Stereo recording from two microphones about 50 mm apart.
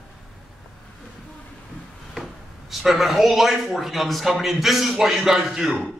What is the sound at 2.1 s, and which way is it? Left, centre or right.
A man's voice, centre.